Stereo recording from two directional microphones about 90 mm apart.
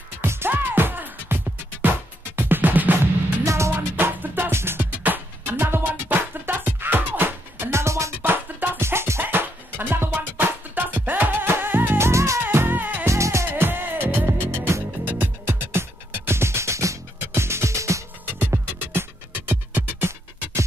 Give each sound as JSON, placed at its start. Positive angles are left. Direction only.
{"t": 0.2, "sound": "music", "side_deg": -25}
{"t": 3.4, "sound": "music", "side_deg": -35}
{"t": 3.7, "sound": "music", "side_deg": -20}
{"t": 8.2, "sound": "music", "side_deg": -20}
{"t": 13.1, "sound": "music", "side_deg": -35}